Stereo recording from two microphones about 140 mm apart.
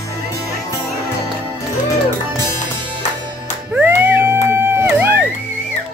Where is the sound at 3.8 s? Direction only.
15° right (ahead or behind).